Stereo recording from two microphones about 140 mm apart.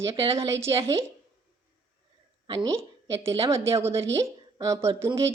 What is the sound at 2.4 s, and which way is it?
Speech, 35° right (ahead or behind).